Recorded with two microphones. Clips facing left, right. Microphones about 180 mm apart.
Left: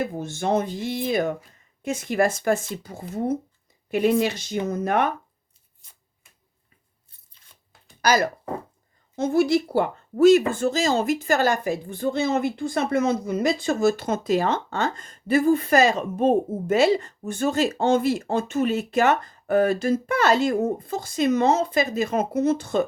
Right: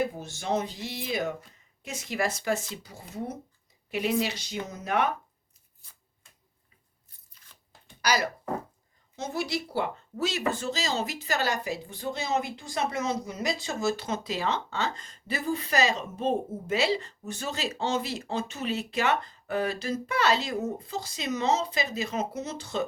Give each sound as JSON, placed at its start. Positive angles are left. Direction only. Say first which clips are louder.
{"t": 0.2, "sound": "speech", "louder": "left 6 dB", "side_deg": 55}
{"t": 8.0, "sound": "speech", "louder": "left 6 dB", "side_deg": 50}